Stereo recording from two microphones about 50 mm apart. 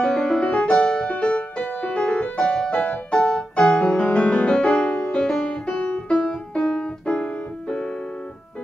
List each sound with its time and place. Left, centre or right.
0.0 s music: left
6.8 s piano: left